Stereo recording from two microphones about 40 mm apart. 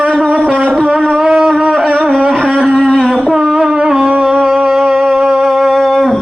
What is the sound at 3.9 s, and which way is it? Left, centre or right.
Music, right.